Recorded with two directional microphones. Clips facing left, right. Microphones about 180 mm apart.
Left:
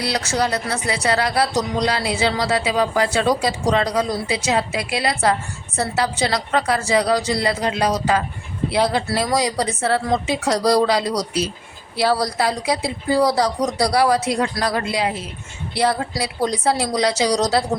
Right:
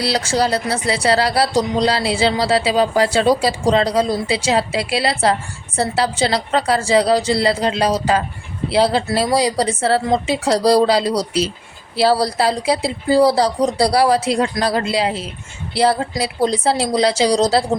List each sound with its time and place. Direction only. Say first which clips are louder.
0.0 s a woman's voice: right 3 dB; 30° right (ahead or behind)